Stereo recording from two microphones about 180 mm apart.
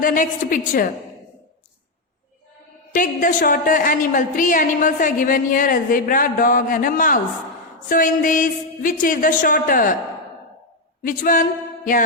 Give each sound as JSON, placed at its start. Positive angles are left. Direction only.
{"t": 0.0, "sound": "a woman's voice", "side_deg": 50}
{"t": 2.9, "sound": "a woman's voice", "side_deg": 45}
{"t": 11.0, "sound": "a woman's voice", "side_deg": 45}